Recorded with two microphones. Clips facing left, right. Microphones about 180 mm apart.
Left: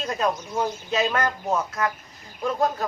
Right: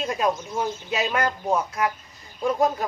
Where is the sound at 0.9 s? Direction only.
10° right (ahead or behind).